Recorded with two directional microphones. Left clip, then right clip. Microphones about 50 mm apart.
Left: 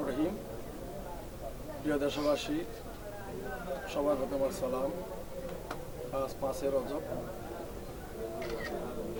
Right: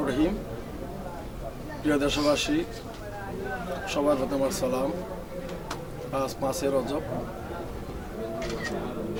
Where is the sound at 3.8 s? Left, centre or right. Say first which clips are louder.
Right 7 dB; right.